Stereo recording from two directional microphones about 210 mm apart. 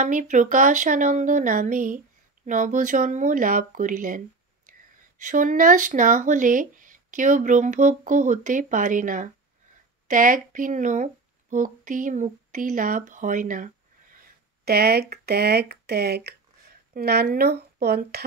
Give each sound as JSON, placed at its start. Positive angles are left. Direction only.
{"t": 0.0, "sound": "speech", "side_deg": -35}
{"t": 5.2, "sound": "speech", "side_deg": -40}